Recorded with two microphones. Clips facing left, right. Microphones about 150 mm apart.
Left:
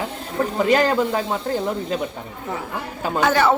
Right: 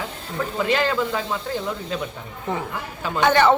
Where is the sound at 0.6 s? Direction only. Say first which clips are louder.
Left 4 dB; 40° left (ahead or behind).